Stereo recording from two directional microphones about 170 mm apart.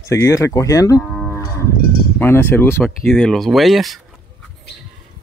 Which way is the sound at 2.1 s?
15° left (ahead or behind).